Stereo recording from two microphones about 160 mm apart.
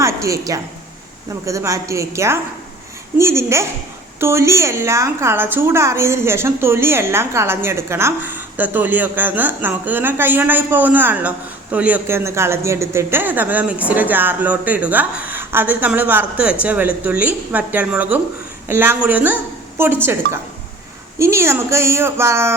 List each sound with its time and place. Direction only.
0.0 s a woman's voice: 20° right (ahead or behind)